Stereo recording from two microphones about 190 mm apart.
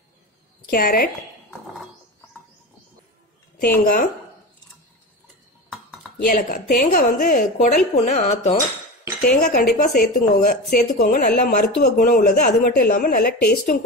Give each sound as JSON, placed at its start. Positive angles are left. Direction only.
{"t": 0.7, "sound": "speech", "side_deg": 50}
{"t": 3.5, "sound": "speech", "side_deg": 50}
{"t": 5.7, "sound": "dishes", "side_deg": 0}
{"t": 6.2, "sound": "a woman's voice", "side_deg": 45}
{"t": 9.2, "sound": "speech", "side_deg": 50}